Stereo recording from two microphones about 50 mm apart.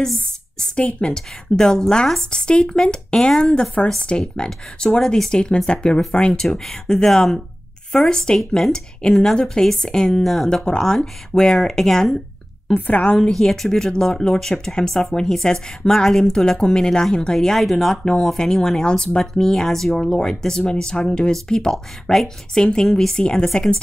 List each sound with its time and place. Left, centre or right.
0.6 s a woman's voice: centre
6.6 s speech: centre
8.4 s speech: centre
12.7 s a woman's voice: left
13.3 s speech: centre
17.4 s speech: centre